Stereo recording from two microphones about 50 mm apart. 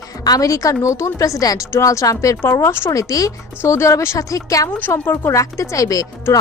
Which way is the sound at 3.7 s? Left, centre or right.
Left.